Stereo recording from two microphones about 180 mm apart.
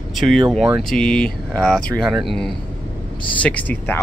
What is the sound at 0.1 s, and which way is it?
Speech, centre (ahead or behind).